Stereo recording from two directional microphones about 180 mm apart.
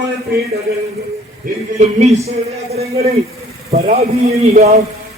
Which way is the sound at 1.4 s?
50° right (ahead or behind).